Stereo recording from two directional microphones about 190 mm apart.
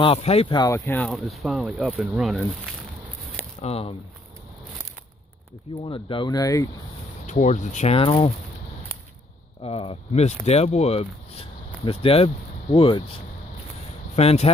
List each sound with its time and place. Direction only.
0.0 s speech: 30° left (ahead or behind)
0.7 s speech: 10° left (ahead or behind)
3.6 s speech: 30° left (ahead or behind)
5.9 s speech: 25° left (ahead or behind)
7.2 s speech: 40° left (ahead or behind)
9.6 s speech: 30° left (ahead or behind)
14.1 s speech: 35° left (ahead or behind)